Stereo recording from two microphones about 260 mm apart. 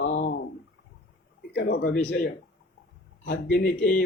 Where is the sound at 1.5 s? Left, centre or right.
Left.